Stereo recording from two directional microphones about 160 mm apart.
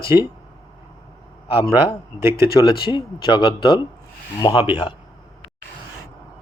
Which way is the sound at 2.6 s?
30° left (ahead or behind).